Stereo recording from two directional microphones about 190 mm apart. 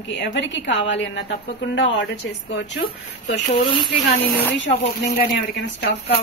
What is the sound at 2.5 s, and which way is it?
Speech, 65° left (ahead or behind).